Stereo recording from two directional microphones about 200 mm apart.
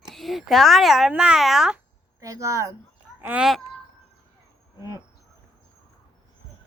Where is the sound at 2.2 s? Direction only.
15° right (ahead or behind).